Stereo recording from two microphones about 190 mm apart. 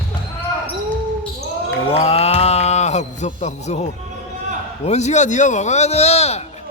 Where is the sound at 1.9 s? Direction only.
30° left (ahead or behind).